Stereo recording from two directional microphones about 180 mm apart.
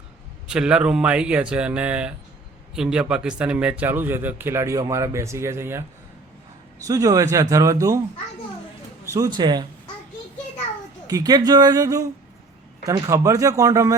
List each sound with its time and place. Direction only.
0.4 s a man's voice: 5° right (ahead or behind)
9.1 s speech: 25° right (ahead or behind)
11.0 s speech: 20° right (ahead or behind)